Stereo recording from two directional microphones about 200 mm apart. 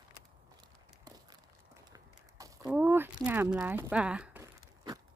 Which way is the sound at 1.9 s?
15° right (ahead or behind).